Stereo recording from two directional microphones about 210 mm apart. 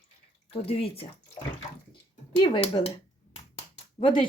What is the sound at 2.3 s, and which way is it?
Speech, 25° left (ahead or behind).